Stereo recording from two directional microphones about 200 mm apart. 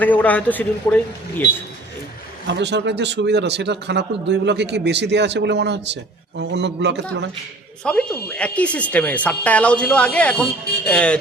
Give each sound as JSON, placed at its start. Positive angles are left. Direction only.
{"t": 0.0, "sound": "a woman's voice", "side_deg": 10}
{"t": 2.5, "sound": "speech", "side_deg": -60}
{"t": 7.9, "sound": "a woman's voice", "side_deg": 5}